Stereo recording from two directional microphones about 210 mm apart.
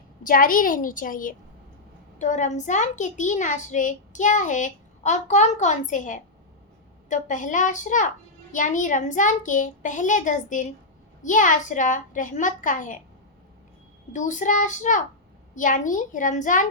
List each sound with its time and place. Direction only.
0.2 s a child's voice: 40° left (ahead or behind)
14.1 s a child's voice: 35° left (ahead or behind)